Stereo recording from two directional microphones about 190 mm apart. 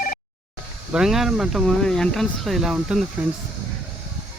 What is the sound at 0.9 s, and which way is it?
Speech, centre (ahead or behind).